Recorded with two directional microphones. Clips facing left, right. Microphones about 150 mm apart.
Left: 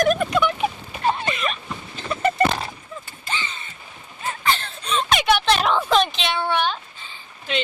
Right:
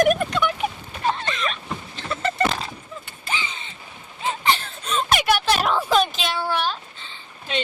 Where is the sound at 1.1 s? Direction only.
10° left (ahead or behind).